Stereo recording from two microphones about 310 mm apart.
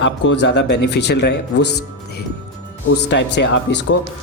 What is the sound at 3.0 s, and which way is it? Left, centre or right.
Speech, left.